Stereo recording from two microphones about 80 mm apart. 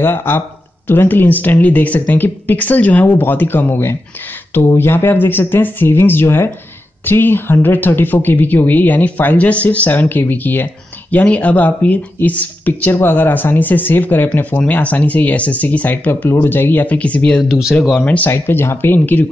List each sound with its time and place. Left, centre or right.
0.0 s speech: left